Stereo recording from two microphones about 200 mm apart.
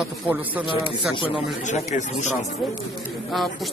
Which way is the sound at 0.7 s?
25° left (ahead or behind).